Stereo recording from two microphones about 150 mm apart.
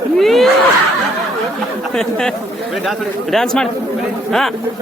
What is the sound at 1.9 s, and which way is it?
A man's voice, 5° left (ahead or behind).